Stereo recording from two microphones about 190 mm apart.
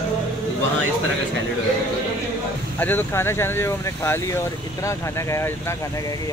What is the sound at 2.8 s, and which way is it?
Speech, 10° left (ahead or behind).